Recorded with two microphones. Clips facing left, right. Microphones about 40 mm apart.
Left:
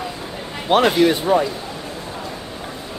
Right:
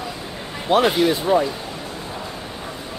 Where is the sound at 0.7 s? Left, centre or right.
Left.